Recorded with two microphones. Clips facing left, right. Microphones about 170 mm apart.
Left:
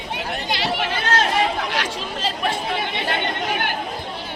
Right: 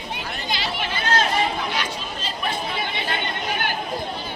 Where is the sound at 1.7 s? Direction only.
90° left.